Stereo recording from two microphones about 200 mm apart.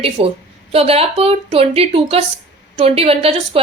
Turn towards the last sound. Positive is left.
turn(degrees=-30)  # may be behind; listen again after turning